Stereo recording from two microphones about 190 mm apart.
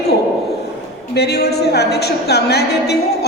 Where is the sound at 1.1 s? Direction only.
60° left (ahead or behind).